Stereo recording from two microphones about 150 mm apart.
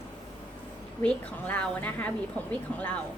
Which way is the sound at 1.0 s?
10° left (ahead or behind).